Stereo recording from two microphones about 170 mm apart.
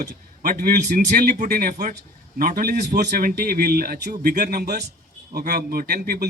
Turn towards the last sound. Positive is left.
turn(degrees=-65)  # may be behind; listen again after turning